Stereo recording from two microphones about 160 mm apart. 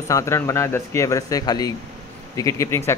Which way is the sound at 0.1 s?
20° left (ahead or behind).